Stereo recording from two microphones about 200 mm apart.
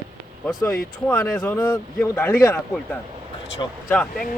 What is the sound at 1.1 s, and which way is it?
A man's voice, 10° left (ahead or behind).